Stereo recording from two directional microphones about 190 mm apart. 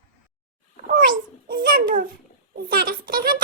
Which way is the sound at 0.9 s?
45° right (ahead or behind).